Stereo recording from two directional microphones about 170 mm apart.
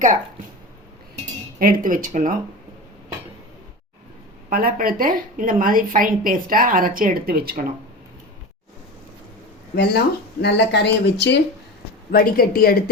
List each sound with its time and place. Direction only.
1.5 s speech: 55° right (ahead or behind)
4.4 s a woman's voice: 60° right (ahead or behind)
9.7 s speech: 75° left (ahead or behind)
10.4 s speech: 85° left
12.1 s a woman's voice: 60° left (ahead or behind)